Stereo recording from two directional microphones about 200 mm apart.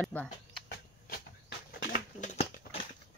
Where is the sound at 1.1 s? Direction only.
50° left (ahead or behind).